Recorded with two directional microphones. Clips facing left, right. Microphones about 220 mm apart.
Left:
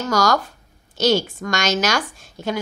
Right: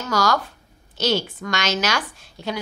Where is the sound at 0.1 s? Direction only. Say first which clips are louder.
Left 1 dB; 45° left (ahead or behind).